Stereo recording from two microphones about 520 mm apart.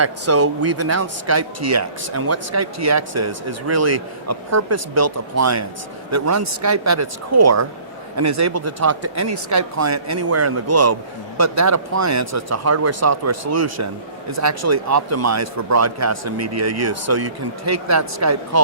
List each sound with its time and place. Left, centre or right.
0.0 s speech: right